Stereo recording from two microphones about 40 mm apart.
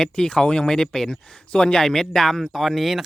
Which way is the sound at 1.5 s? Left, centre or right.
Left.